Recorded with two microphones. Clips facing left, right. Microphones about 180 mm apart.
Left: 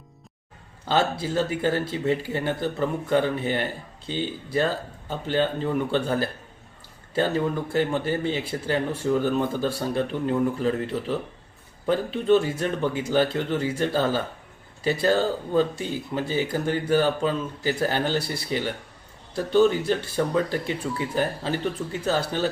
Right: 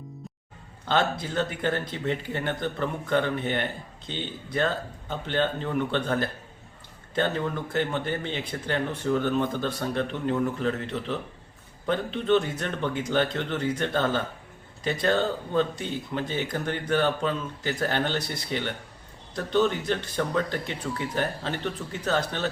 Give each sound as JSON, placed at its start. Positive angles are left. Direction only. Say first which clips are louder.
{"t": 0.9, "sound": "speech", "louder": "left 2 dB", "side_deg": 5}